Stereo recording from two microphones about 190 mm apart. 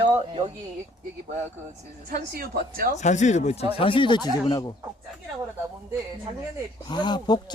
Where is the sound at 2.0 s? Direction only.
50° right (ahead or behind).